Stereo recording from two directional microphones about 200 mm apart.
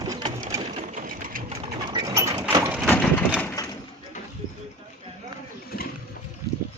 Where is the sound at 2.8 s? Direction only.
5° left (ahead or behind).